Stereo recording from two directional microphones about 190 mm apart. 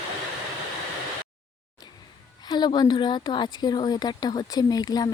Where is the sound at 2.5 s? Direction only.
25° left (ahead or behind).